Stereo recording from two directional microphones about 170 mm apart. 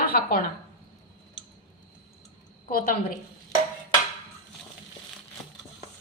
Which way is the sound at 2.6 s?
55° left (ahead or behind).